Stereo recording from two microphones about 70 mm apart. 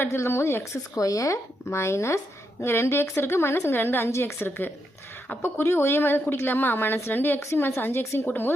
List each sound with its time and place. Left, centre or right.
0.0 s speech: left